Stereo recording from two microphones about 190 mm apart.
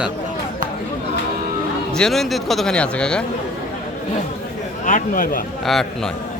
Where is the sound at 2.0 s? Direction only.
Centre (ahead or behind).